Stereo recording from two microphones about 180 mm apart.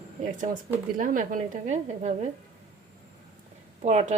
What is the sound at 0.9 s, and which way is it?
A woman's voice, 50° right (ahead or behind).